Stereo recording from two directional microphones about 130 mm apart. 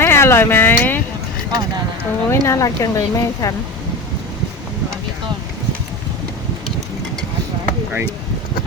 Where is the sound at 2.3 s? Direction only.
25° left (ahead or behind).